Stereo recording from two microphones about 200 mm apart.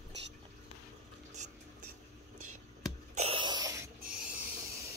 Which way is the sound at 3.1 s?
30° right (ahead or behind).